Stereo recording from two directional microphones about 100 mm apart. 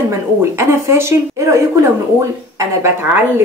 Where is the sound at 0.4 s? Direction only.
30° right (ahead or behind).